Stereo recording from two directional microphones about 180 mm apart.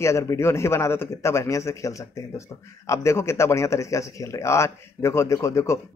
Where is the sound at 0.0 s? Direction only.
15° left (ahead or behind).